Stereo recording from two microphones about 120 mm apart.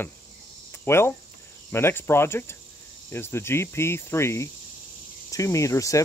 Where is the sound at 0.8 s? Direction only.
20° left (ahead or behind).